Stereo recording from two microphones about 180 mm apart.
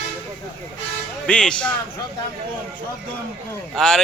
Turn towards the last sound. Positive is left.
turn(degrees=5)  # may be behind; listen again after turning